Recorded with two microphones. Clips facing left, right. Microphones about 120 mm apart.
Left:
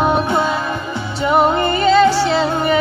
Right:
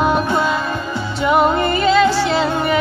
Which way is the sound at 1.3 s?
35° left (ahead or behind).